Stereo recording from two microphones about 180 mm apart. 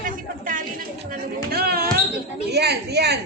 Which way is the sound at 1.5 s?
60° right (ahead or behind).